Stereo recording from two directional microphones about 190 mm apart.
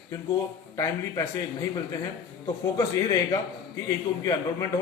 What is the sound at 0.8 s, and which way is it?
Speech, 15° left (ahead or behind).